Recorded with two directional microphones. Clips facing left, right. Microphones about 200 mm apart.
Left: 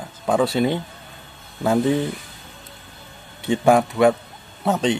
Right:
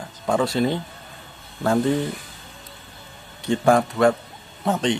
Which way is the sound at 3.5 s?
5° left (ahead or behind).